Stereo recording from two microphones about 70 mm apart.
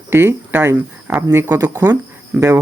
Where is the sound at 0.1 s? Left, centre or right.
Right.